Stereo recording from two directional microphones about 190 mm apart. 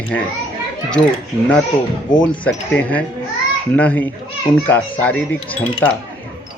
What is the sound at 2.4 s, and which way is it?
Speech, 5° left (ahead or behind).